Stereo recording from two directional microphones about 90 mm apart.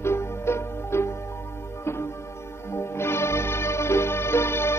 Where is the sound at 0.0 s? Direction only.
30° left (ahead or behind).